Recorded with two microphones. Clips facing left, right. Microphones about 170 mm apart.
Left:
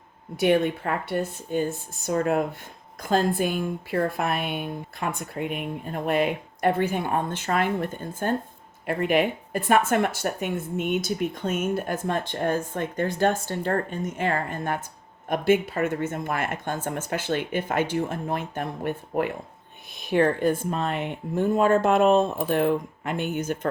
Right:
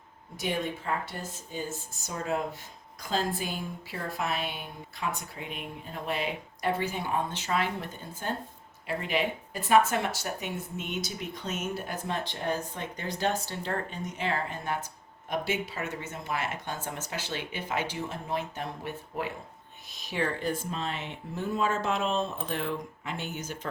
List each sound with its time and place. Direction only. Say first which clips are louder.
0.3 s speech: left 11 dB; 65° left (ahead or behind)